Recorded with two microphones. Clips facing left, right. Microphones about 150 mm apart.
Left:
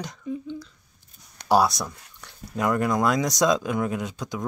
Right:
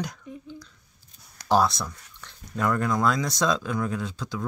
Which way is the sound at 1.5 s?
15° left (ahead or behind).